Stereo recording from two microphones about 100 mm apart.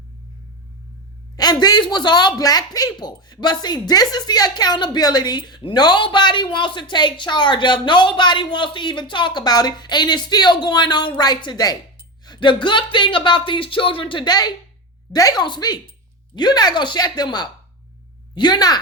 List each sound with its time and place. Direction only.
1.4 s speech: 40° left (ahead or behind)
12.2 s a sound: 50° left (ahead or behind)
12.6 s a woman's voice: 50° left (ahead or behind)